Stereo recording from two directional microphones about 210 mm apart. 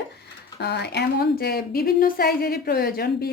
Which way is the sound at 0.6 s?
50° left (ahead or behind).